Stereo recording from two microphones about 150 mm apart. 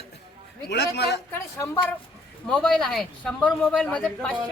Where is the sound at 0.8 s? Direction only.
90° left.